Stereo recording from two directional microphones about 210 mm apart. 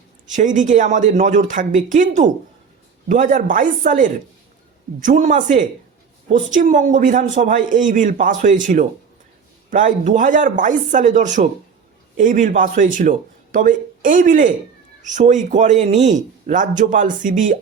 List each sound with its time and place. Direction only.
0.3 s a man's voice: 35° right (ahead or behind)